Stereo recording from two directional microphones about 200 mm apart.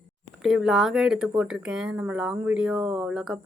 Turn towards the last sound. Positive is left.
turn(degrees=-5)  # may be behind; listen again after turning